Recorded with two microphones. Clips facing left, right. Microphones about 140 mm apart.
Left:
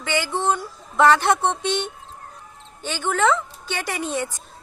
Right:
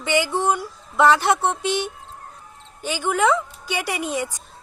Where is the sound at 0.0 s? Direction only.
15° right (ahead or behind).